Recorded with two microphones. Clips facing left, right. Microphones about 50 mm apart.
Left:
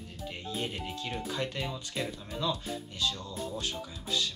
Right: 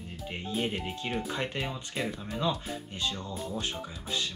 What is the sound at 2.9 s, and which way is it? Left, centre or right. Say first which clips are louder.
Speech: even; right.